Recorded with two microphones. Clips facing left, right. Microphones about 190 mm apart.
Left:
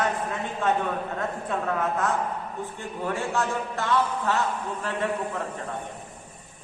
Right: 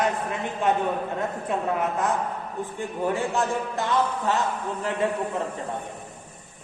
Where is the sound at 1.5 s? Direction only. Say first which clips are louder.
Right 1 dB; 20° right (ahead or behind).